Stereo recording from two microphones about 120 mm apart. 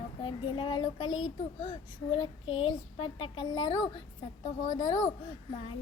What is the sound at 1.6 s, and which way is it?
Child singing, 50° left (ahead or behind).